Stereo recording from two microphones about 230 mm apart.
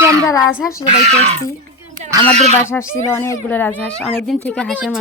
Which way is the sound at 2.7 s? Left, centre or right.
Centre.